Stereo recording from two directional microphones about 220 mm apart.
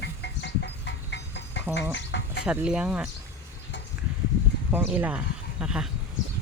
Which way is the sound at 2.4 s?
5° right (ahead or behind).